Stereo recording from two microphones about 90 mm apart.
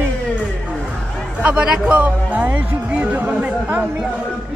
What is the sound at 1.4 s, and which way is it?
Speech, 10° right (ahead or behind).